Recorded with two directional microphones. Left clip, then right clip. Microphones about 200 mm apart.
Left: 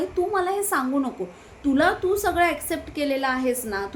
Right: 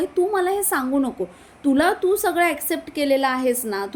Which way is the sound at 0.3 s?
25° right (ahead or behind).